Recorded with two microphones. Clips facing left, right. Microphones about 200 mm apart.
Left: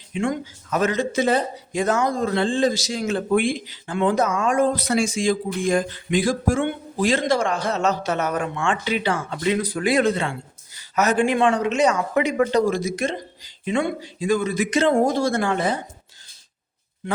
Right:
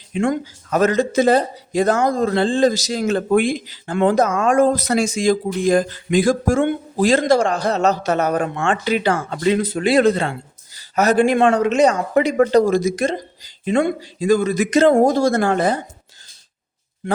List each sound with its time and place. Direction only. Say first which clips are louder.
0.1 s speech: right 4 dB; 40° right (ahead or behind)
9.6 s speech: right 4 dB; 25° right (ahead or behind)
11.4 s speech: right 4 dB; 50° right (ahead or behind)